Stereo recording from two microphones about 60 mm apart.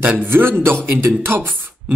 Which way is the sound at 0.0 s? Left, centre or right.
Right.